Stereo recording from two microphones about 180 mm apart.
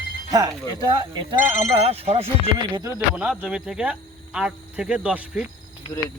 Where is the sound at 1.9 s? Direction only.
35° right (ahead or behind).